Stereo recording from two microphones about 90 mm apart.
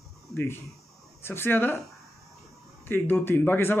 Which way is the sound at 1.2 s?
25° left (ahead or behind).